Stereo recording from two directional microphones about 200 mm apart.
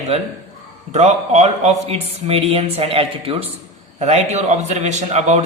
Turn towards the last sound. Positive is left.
turn(degrees=-35)  # may be behind; listen again after turning